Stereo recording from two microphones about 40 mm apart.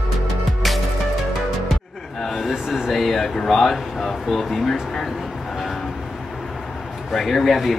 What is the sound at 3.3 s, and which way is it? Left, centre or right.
Speech, centre.